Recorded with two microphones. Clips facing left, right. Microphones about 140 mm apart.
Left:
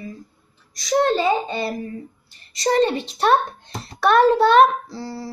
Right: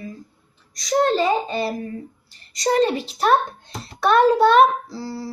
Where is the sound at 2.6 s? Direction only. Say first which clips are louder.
Even; centre (ahead or behind).